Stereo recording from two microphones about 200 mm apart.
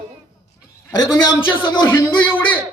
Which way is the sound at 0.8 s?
15° left (ahead or behind).